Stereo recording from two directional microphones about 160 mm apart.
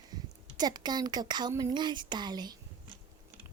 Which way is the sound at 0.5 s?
25° right (ahead or behind).